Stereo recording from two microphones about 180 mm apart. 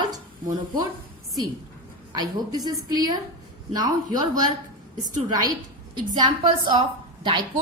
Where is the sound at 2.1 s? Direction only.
20° right (ahead or behind).